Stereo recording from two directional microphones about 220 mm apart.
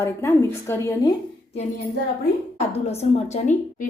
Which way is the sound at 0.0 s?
10° left (ahead or behind).